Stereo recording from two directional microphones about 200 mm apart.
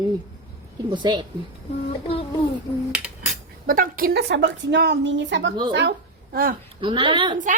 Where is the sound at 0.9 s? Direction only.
20° right (ahead or behind).